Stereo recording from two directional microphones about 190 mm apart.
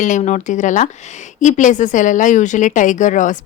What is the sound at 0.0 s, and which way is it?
A woman's voice, 40° left (ahead or behind).